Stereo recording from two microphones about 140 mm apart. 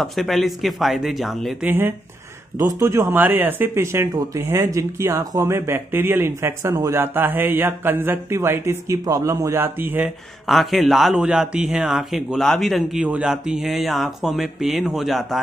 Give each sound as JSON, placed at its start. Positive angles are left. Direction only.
{"t": 0.0, "sound": "speech", "side_deg": 0}
{"t": 1.7, "sound": "speech", "side_deg": -15}
{"t": 10.0, "sound": "speech", "side_deg": 0}